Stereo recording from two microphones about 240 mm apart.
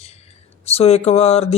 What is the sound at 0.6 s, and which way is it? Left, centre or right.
Speech, left.